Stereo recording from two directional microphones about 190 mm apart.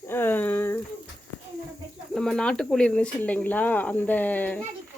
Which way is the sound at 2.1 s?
Centre (ahead or behind).